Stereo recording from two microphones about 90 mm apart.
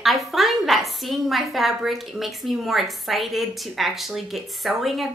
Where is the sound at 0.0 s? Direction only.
Centre (ahead or behind).